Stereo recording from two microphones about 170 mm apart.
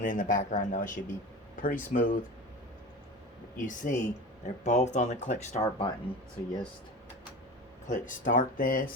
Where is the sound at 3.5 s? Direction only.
50° left (ahead or behind).